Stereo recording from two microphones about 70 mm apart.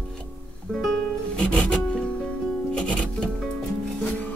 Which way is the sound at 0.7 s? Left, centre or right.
Centre.